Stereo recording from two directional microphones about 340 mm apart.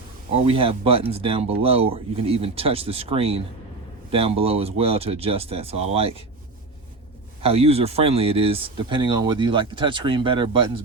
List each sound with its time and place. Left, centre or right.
0.3 s speech: centre
7.4 s speech: centre